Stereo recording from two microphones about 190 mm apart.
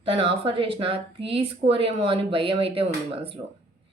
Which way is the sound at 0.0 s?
30° right (ahead or behind).